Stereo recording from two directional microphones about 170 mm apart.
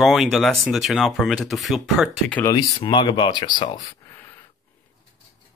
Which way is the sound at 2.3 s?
20° left (ahead or behind).